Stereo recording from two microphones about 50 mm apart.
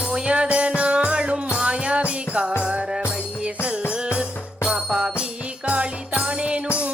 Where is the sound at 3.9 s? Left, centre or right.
Right.